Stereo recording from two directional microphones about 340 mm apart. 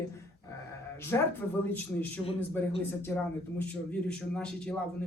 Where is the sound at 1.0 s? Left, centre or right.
Centre.